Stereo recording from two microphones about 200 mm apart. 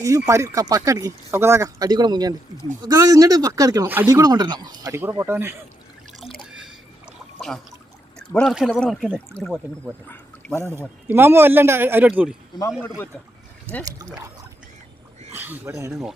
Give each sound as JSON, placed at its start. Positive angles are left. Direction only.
{"t": 0.3, "sound": "speech", "side_deg": -15}
{"t": 6.3, "sound": "drip", "side_deg": 0}
{"t": 7.3, "sound": "a sound", "side_deg": 0}
{"t": 8.2, "sound": "speech", "side_deg": 5}
{"t": 10.1, "sound": "a sound", "side_deg": 10}
{"t": 10.7, "sound": "speech", "side_deg": -10}
{"t": 15.3, "sound": "speech", "side_deg": -10}